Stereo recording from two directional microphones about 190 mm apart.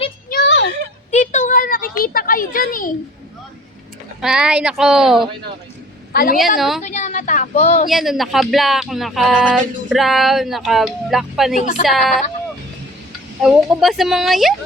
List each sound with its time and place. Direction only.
0.3 s a sound: 65° left (ahead or behind)
1.1 s a sound: 40° left (ahead or behind)
4.2 s speech: 5° right (ahead or behind)
6.1 s a woman's voice: 50° left (ahead or behind)
6.6 s speech: centre (ahead or behind)
6.8 s a woman's voice: 40° left (ahead or behind)
7.9 s speech: centre (ahead or behind)
11.5 s a woman's voice: 40° left (ahead or behind)
13.4 s speech: centre (ahead or behind)